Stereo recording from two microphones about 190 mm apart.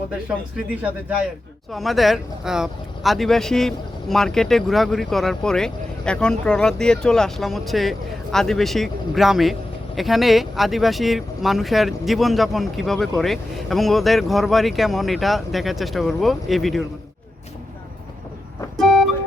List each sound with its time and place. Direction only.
0.3 s speech: 5° right (ahead or behind)
18.8 s vehicle: centre (ahead or behind)